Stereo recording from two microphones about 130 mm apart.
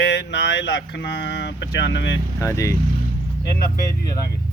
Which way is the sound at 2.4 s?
25° left (ahead or behind).